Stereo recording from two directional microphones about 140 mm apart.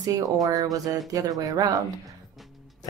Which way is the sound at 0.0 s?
25° right (ahead or behind).